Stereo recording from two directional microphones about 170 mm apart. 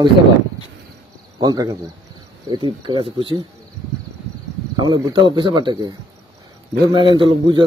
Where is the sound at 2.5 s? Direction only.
30° right (ahead or behind).